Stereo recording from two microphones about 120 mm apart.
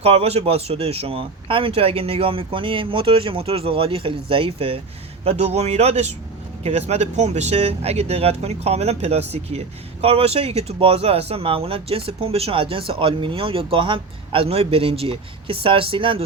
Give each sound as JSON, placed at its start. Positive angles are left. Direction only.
{"t": 0.0, "sound": "speech", "side_deg": -55}